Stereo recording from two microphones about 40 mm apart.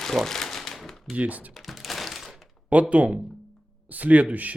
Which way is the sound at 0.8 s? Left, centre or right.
Centre.